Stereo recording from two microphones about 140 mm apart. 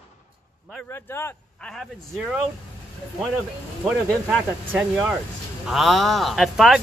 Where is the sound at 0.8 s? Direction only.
15° left (ahead or behind).